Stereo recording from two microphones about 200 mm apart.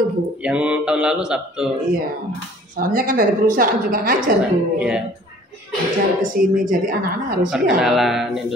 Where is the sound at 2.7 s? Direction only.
45° right (ahead or behind).